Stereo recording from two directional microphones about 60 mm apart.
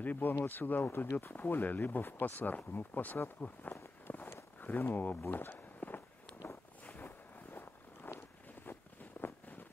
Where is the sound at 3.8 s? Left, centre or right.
Left.